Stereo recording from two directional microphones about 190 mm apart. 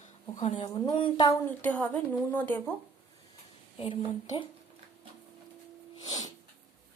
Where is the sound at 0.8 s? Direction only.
25° left (ahead or behind).